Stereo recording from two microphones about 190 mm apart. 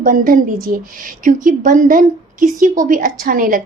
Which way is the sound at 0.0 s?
45° right (ahead or behind).